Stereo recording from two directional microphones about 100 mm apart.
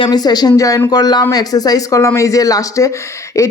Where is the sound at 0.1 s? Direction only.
40° left (ahead or behind).